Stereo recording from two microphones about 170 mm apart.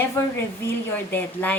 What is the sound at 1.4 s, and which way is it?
Speech, 10° left (ahead or behind).